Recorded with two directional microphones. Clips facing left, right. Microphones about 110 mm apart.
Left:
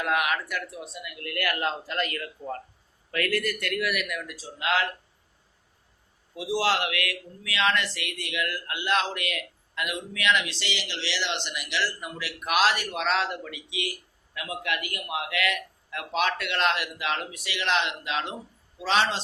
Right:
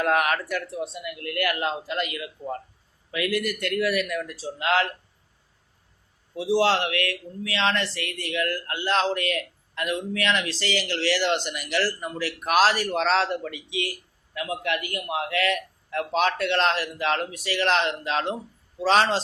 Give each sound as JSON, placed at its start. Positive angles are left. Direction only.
{"t": 0.0, "sound": "a man's voice", "side_deg": -40}
{"t": 3.7, "sound": "speech", "side_deg": -30}
{"t": 6.3, "sound": "speech", "side_deg": -30}